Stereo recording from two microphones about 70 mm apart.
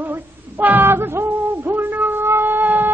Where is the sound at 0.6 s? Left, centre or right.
Right.